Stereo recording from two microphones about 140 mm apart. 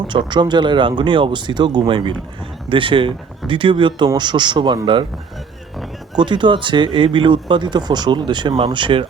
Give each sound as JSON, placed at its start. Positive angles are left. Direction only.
{"t": 0.1, "sound": "speech", "side_deg": -35}
{"t": 6.1, "sound": "speech", "side_deg": -35}